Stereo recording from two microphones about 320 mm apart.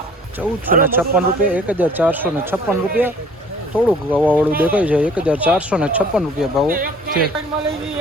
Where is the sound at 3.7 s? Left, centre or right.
Centre.